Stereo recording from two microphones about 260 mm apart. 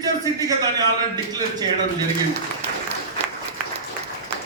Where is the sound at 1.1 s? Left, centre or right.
Centre.